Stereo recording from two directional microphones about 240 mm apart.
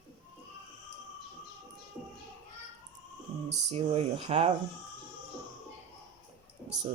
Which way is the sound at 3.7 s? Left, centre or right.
Right.